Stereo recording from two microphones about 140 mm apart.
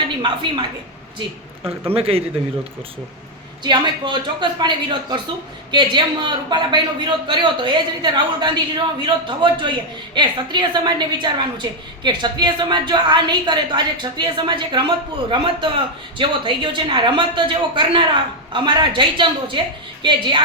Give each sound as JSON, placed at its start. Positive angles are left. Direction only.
{"t": 1.6, "sound": "a man's voice", "side_deg": -15}
{"t": 2.0, "sound": "a man's voice", "side_deg": -45}
{"t": 3.6, "sound": "a woman's voice", "side_deg": -35}